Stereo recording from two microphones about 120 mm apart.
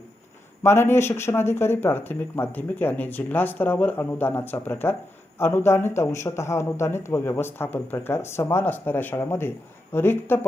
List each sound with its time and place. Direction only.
0.6 s speech: 20° left (ahead or behind)